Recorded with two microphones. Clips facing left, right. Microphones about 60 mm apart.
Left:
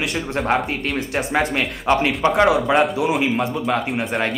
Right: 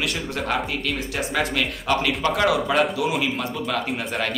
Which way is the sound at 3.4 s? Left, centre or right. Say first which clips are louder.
Left 5 dB; centre.